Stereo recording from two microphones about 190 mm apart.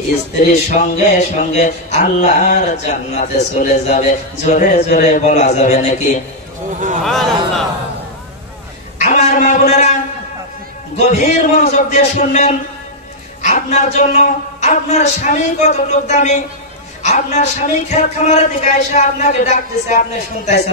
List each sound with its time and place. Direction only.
0.7 s speech: 40° left (ahead or behind)
7.1 s speech: centre (ahead or behind)
8.9 s a sound: 40° left (ahead or behind)
11.0 s speech: 35° left (ahead or behind)